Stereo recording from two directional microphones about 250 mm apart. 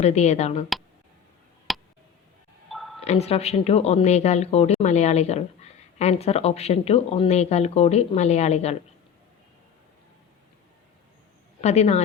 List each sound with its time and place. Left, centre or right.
0.0 s speech: left
1.7 s tick: centre
2.6 s a sound: centre
3.0 s speech: left
11.6 s speech: left